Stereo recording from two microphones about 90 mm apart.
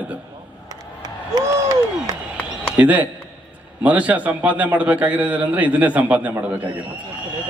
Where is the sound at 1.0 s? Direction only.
45° right (ahead or behind).